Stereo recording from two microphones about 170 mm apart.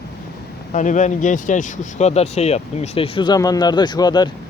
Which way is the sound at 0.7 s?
45° left (ahead or behind).